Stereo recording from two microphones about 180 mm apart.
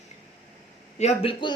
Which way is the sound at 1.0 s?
40° left (ahead or behind).